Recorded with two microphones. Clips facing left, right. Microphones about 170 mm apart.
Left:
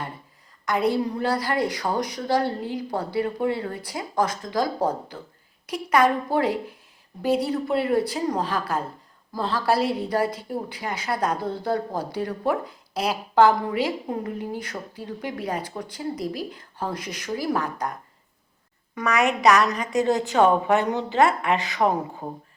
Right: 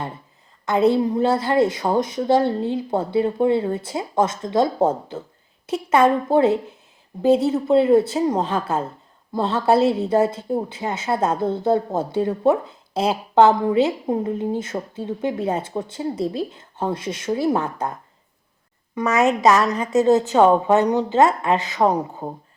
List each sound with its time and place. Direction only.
0.6 s a woman's voice: 25° right (ahead or behind)
18.9 s a woman's voice: 25° right (ahead or behind)